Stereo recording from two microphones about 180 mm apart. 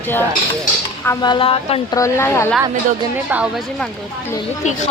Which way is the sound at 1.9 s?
15° left (ahead or behind).